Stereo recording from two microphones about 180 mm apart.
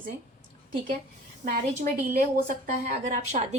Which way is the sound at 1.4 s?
40° right (ahead or behind).